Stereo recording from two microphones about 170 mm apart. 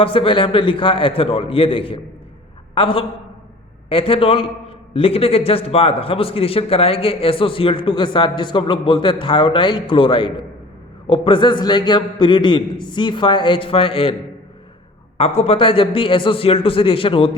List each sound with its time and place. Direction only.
0.0 s a man's voice: 30° left (ahead or behind)
15.2 s a man's voice: 35° left (ahead or behind)